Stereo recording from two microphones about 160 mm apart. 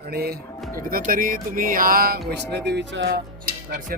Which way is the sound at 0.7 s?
65° right (ahead or behind).